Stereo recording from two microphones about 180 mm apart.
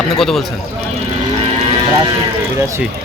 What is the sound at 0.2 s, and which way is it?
Speech, centre (ahead or behind).